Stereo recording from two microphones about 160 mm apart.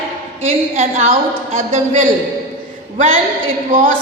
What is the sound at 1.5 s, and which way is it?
Speech, 50° right (ahead or behind).